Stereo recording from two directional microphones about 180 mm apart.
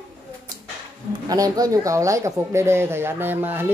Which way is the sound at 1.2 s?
20° right (ahead or behind).